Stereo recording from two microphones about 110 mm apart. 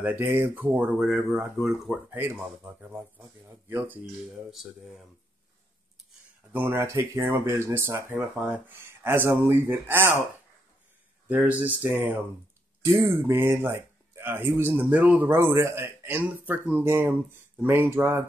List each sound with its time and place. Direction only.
0.0 s speech: 20° right (ahead or behind)
1.0 s speech: 5° right (ahead or behind)
2.0 s speech: 20° right (ahead or behind)
4.5 s speech: centre (ahead or behind)
6.5 s speech: 20° right (ahead or behind)
11.2 s speech: 10° right (ahead or behind)